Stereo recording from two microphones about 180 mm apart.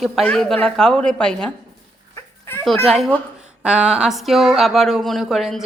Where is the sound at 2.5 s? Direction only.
10° left (ahead or behind).